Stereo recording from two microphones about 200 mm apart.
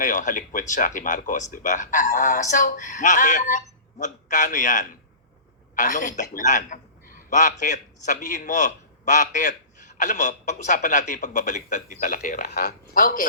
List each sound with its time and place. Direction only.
0.0 s a man's voice: 40° left (ahead or behind)
12.5 s speech: 50° left (ahead or behind)